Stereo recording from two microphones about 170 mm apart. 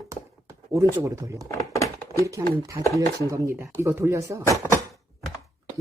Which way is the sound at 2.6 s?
20° right (ahead or behind).